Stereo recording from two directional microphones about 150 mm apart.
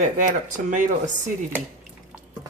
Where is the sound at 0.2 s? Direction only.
60° right (ahead or behind).